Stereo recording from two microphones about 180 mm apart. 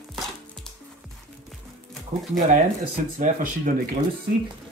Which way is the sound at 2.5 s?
50° right (ahead or behind).